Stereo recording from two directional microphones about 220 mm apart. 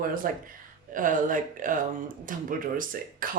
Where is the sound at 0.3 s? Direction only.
40° right (ahead or behind).